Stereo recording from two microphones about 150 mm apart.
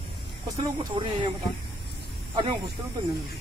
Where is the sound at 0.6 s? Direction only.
30° right (ahead or behind).